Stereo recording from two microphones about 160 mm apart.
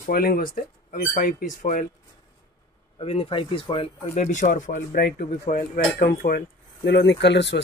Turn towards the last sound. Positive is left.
turn(degrees=90)